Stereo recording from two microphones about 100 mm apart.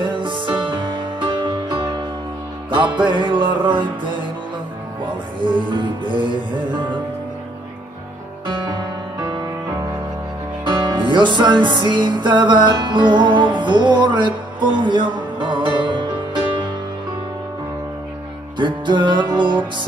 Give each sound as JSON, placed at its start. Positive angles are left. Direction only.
{"t": 0.0, "sound": "music", "side_deg": -50}
{"t": 8.5, "sound": "music", "side_deg": -50}
{"t": 10.6, "sound": "music", "side_deg": -50}
{"t": 18.6, "sound": "music", "side_deg": -50}